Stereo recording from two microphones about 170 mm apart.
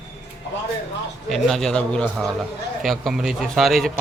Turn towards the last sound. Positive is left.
turn(degrees=0)  # may be behind; listen again after turning